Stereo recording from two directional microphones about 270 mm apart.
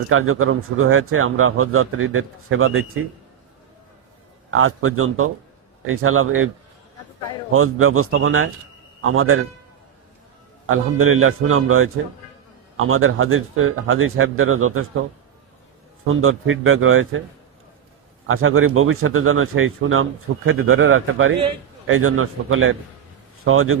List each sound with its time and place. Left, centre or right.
0.1 s a man's voice: right
4.5 s a man's voice: right
7.5 s a man's voice: right
10.7 s a man's voice: right
16.0 s a man's voice: right
18.3 s a man's voice: right